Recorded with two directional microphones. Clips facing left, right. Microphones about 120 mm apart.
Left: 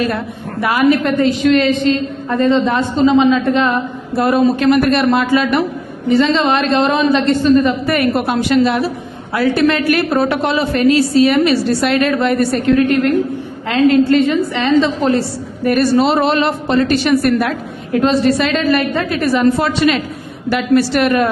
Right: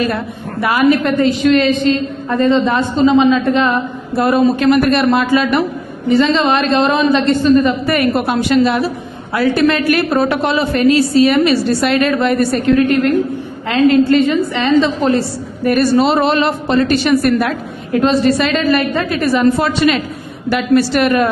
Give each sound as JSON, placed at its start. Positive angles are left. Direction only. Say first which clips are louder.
{"t": 0.6, "sound": "a woman's voice", "louder": "right 1 dB", "side_deg": -20}